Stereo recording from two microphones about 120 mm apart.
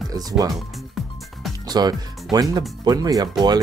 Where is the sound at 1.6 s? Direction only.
35° right (ahead or behind).